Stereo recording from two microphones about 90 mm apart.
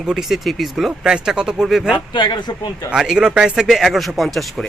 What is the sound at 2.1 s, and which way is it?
Speech, 55° left (ahead or behind).